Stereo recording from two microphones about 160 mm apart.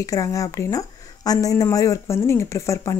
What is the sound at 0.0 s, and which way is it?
Speech, 20° left (ahead or behind).